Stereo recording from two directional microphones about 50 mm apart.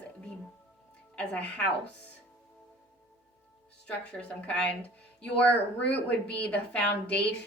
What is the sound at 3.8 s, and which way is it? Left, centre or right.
A woman's voice, left.